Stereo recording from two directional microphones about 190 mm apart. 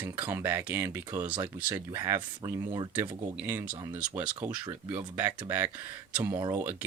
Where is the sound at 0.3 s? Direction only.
10° right (ahead or behind).